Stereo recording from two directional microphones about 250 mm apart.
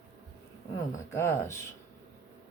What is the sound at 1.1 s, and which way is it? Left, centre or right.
Speech, centre.